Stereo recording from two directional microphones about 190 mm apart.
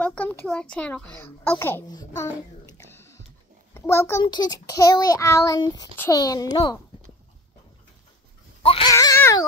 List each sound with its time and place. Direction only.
0.0 s a child's voice: 5° left (ahead or behind)
8.6 s baby cry: 30° left (ahead or behind)
8.9 s speech: 15° left (ahead or behind)